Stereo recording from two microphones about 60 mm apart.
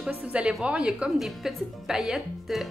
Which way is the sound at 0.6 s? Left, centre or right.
Centre.